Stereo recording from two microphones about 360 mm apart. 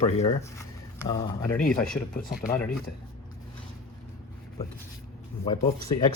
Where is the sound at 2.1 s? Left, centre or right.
Left.